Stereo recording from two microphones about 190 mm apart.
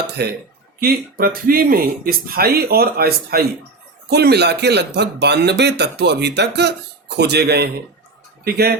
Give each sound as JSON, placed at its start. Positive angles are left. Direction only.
{"t": 0.2, "sound": "speech", "side_deg": -55}